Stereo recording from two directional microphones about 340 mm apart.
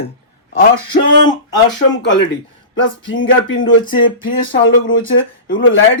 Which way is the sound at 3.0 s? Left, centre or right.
Left.